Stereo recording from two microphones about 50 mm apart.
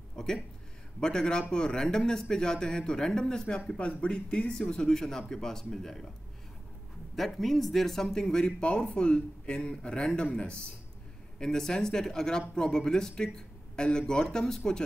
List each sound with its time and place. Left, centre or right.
0.1 s a sound: centre
1.0 s speech: centre
7.2 s speech: centre